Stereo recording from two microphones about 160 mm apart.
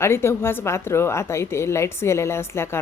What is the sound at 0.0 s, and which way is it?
A woman's voice, 15° left (ahead or behind).